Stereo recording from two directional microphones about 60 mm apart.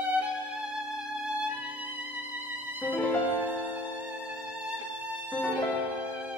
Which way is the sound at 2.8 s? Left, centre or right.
Left.